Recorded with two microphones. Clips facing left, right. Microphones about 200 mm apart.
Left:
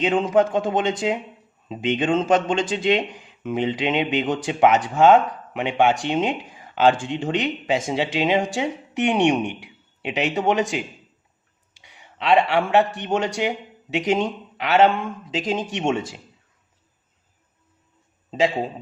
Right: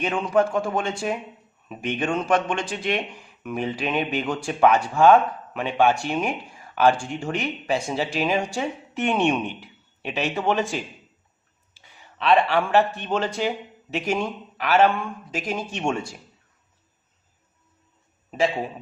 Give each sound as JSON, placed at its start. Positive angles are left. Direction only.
{"t": 0.3, "sound": "a man's voice", "side_deg": 20}
{"t": 11.7, "sound": "a sound", "side_deg": 15}
{"t": 13.0, "sound": "a man's voice", "side_deg": 15}
{"t": 18.3, "sound": "a man's voice", "side_deg": 20}